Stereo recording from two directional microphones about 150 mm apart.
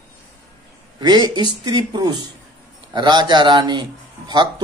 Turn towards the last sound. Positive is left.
turn(degrees=-30)  # may be behind; listen again after turning